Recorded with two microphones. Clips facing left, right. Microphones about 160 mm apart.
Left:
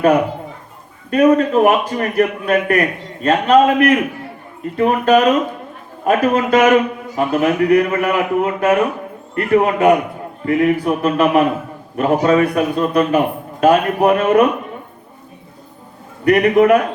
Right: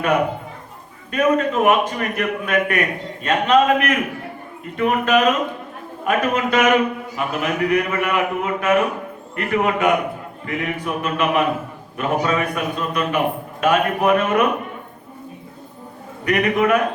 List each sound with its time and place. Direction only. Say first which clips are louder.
1.1 s a man's voice: left 6 dB; 35° left (ahead or behind)
16.2 s a man's voice: left 7 dB; 35° left (ahead or behind)